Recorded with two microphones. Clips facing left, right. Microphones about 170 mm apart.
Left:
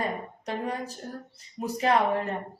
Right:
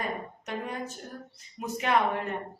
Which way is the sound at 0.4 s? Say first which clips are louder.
Left 4 dB; 35° left (ahead or behind).